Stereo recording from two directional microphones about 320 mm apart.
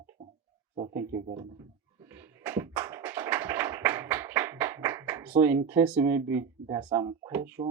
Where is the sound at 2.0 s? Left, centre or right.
Centre.